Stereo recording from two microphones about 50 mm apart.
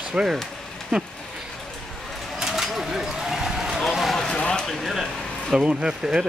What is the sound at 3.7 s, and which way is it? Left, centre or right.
Run, centre.